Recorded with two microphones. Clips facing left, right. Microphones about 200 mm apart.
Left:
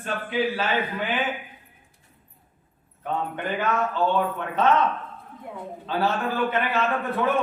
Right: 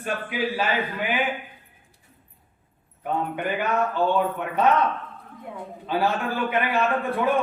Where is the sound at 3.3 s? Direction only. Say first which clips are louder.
Left 1 dB; 10° right (ahead or behind).